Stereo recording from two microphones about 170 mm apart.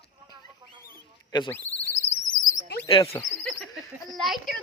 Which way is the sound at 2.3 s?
25° left (ahead or behind).